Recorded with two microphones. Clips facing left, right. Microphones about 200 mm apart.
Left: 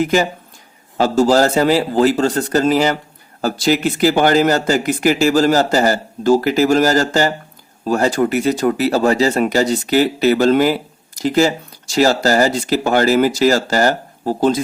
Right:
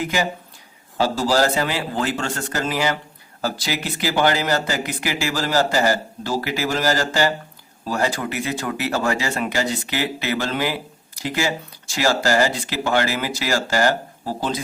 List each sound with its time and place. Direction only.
0.9 s speech: 45° left (ahead or behind)